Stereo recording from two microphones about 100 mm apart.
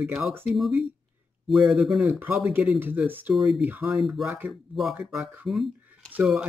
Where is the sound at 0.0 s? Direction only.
15° right (ahead or behind).